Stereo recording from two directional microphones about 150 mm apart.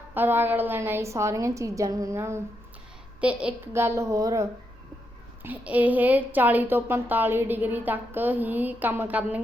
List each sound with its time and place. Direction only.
0.1 s a woman's voice: 15° right (ahead or behind)
5.4 s a woman's voice: 10° right (ahead or behind)